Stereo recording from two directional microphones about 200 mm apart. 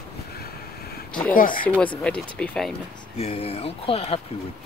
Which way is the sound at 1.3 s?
45° left (ahead or behind).